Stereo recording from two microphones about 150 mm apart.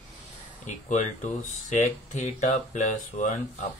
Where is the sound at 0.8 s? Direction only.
55° left (ahead or behind).